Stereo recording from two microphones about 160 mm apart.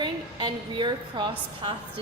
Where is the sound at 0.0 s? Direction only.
30° right (ahead or behind).